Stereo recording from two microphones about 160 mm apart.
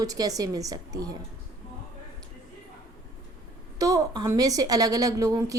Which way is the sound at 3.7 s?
20° right (ahead or behind).